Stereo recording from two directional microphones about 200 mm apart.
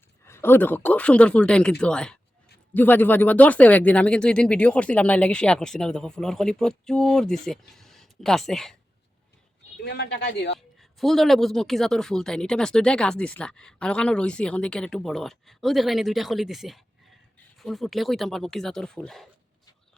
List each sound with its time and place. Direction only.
0.3 s speech: 10° left (ahead or behind)
9.8 s speech: 60° left (ahead or behind)
10.8 s speech: centre (ahead or behind)